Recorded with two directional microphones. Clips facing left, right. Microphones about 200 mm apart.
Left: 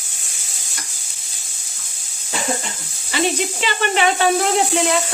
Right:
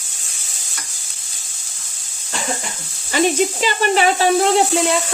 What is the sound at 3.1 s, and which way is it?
A woman's voice, 40° right (ahead or behind).